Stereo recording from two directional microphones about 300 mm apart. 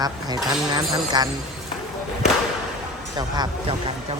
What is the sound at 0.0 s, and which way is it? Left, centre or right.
Speech, centre.